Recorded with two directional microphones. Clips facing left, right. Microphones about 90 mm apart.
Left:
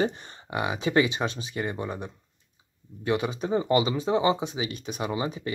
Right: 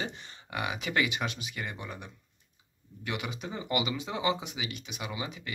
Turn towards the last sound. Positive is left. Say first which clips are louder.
# left 8 dB
turn(degrees=35)  # may be behind; listen again after turning